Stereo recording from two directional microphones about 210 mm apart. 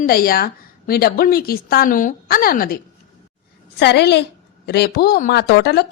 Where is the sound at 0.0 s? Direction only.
45° left (ahead or behind).